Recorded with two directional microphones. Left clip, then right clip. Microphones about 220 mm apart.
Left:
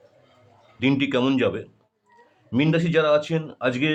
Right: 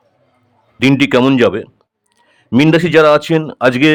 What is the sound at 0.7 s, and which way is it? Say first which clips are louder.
A man's voice: right 11 dB; 35° right (ahead or behind).